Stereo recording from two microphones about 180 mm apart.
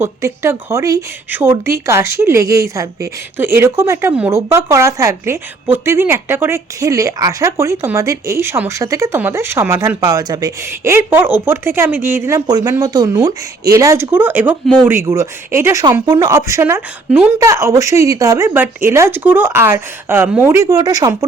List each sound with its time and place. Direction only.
0.0 s a woman's voice: 15° right (ahead or behind)